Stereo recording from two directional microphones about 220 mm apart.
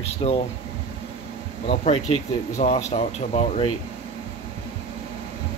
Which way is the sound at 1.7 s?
30° left (ahead or behind).